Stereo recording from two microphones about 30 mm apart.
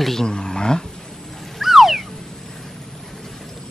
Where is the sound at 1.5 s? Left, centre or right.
Centre.